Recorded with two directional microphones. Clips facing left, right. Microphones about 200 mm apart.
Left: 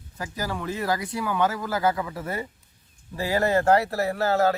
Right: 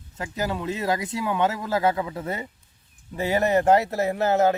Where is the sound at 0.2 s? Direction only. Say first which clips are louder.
Right 3 dB; 25° right (ahead or behind).